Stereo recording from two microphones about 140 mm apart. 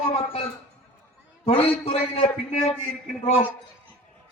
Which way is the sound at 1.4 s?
45° left (ahead or behind).